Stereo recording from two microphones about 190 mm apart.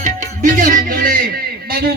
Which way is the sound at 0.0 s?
45° right (ahead or behind).